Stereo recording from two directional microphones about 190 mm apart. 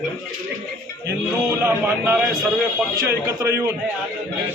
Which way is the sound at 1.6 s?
10° right (ahead or behind).